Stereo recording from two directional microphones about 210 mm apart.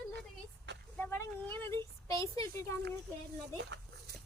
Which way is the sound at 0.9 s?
10° left (ahead or behind).